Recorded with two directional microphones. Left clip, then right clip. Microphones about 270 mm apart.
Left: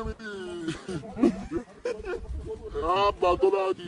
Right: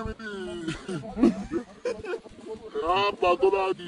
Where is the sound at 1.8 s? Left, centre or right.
Right.